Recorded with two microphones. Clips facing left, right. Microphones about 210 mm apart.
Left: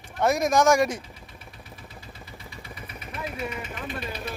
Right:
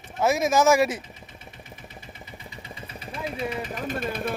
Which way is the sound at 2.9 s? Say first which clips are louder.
Right 2 dB; 30° right (ahead or behind).